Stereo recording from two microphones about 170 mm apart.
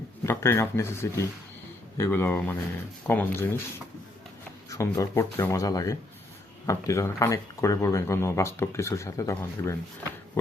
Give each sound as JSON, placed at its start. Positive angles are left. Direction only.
{"t": 0.3, "sound": "speech", "side_deg": 15}
{"t": 4.7, "sound": "speech", "side_deg": 20}
{"t": 10.4, "sound": "pig", "side_deg": 15}